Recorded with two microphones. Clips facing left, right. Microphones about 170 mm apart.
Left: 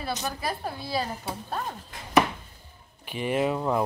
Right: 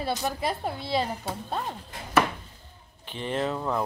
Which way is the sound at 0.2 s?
25° right (ahead or behind).